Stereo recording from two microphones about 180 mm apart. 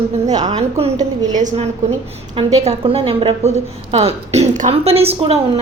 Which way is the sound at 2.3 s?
35° right (ahead or behind).